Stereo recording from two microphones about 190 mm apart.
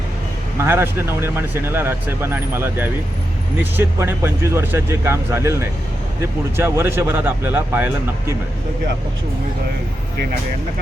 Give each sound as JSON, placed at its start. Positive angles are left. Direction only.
{"t": 0.6, "sound": "speech", "side_deg": -10}